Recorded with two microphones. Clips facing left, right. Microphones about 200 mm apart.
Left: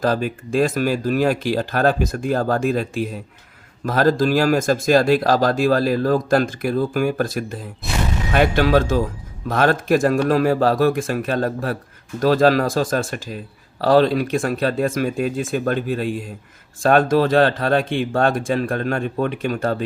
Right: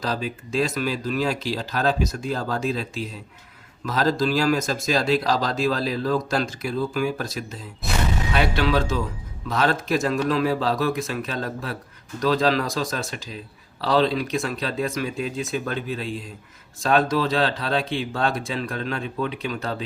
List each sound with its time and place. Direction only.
0.0 s speech: 50° left (ahead or behind)